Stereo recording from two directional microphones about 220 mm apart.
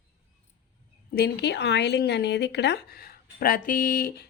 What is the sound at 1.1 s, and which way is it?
Speech, 50° left (ahead or behind).